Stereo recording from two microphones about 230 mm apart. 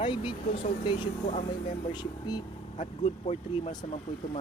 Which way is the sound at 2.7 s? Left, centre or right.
Left.